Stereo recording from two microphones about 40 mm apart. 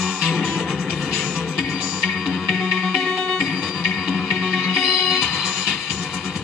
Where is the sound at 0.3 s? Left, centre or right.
Centre.